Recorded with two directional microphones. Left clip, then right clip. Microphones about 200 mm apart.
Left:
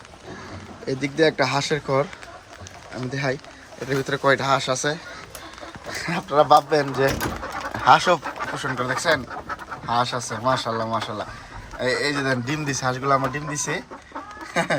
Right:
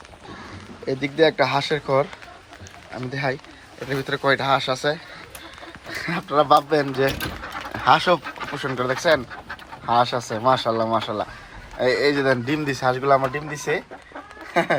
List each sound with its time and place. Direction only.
0.9 s a man's voice: 10° left (ahead or behind)